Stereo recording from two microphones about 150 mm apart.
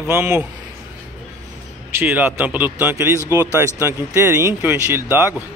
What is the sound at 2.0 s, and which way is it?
Speech, 15° right (ahead or behind).